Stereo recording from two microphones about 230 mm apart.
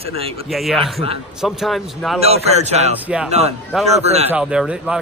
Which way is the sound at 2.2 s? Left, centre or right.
Right.